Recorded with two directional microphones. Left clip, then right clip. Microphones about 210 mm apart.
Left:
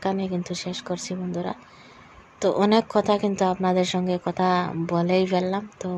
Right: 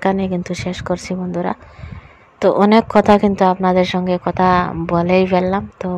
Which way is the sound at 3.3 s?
20° right (ahead or behind).